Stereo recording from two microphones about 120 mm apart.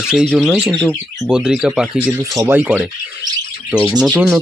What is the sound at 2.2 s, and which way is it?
Speech, 30° right (ahead or behind).